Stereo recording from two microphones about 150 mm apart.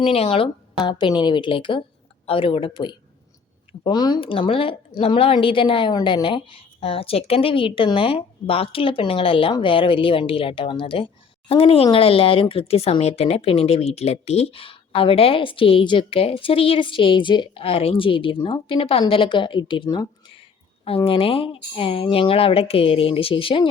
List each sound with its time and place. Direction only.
0.0 s a woman's voice: 40° left (ahead or behind)